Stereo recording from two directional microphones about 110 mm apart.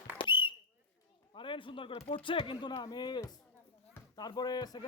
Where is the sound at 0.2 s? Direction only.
50° left (ahead or behind).